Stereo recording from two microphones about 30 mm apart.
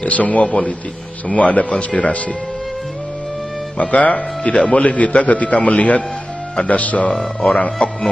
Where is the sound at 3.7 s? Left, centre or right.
Left.